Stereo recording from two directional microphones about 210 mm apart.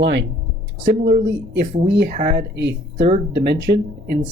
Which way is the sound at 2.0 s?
40° right (ahead or behind).